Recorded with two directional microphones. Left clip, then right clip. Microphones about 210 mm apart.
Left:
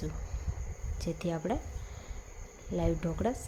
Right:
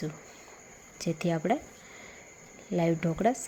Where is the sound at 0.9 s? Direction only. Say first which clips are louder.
Right 5 dB; 15° right (ahead or behind).